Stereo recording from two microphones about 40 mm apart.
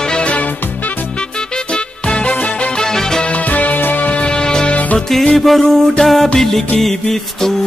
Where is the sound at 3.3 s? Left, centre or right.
Left.